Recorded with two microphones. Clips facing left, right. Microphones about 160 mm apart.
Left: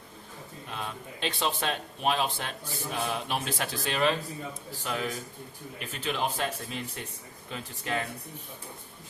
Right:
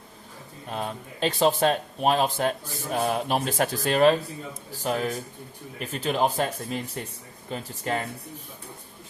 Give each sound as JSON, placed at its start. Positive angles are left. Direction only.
{"t": 0.7, "sound": "speech", "side_deg": -40}